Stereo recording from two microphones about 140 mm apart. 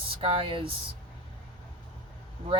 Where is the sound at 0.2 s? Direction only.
40° right (ahead or behind).